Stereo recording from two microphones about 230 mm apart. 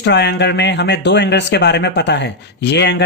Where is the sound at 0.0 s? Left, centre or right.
Left.